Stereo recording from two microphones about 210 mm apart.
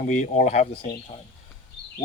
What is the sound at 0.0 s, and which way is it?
Speech, 40° left (ahead or behind).